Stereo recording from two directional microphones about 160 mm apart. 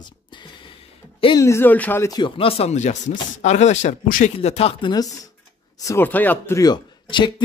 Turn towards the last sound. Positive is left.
turn(degrees=30)  # may be behind; listen again after turning